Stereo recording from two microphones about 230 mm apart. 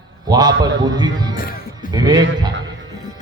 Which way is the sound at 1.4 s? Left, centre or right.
Left.